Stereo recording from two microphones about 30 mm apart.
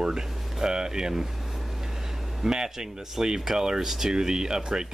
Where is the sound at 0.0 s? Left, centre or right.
Right.